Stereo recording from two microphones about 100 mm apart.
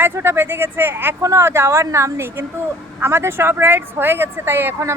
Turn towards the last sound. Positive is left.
turn(degrees=-20)  # may be behind; listen again after turning